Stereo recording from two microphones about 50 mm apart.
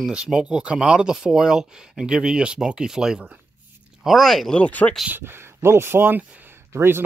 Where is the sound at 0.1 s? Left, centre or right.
Centre.